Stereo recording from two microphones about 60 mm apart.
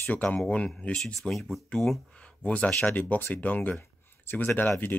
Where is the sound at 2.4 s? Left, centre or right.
Left.